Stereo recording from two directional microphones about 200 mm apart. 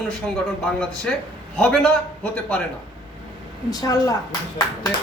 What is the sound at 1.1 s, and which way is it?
Speech, 5° left (ahead or behind).